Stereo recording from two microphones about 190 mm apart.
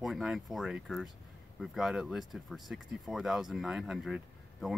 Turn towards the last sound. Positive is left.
turn(degrees=0)  # may be behind; listen again after turning